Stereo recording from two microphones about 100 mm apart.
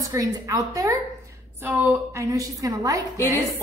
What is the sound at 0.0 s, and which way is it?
Speech, 35° right (ahead or behind).